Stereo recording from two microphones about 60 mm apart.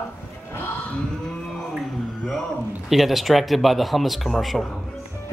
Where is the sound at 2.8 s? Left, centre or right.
Centre.